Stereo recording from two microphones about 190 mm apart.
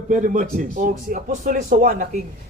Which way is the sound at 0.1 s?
40° right (ahead or behind).